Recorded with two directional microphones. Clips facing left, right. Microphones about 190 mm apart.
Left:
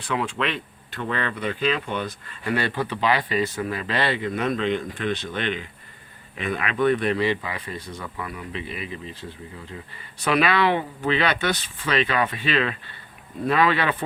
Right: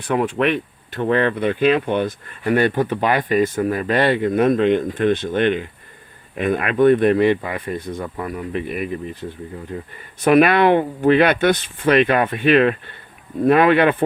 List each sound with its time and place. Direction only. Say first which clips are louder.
0.0 s speech: right 7 dB; 55° right (ahead or behind)
8.0 s speech: right 7 dB; 40° right (ahead or behind)
9.7 s speech: right 10 dB; 40° right (ahead or behind)
10.2 s speech: right 8 dB; 50° right (ahead or behind)